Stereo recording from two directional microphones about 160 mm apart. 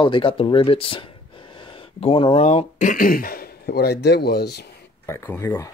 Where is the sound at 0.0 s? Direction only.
30° left (ahead or behind); by 4.6 s 90° left.